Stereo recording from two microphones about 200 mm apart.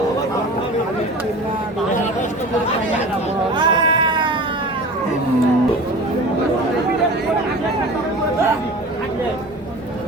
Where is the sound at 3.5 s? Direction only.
20° right (ahead or behind).